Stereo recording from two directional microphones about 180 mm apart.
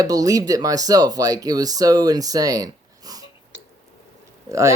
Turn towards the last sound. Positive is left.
turn(degrees=-15)  # may be behind; listen again after turning